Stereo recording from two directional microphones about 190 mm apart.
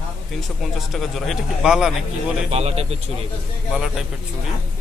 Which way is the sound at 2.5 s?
30° right (ahead or behind).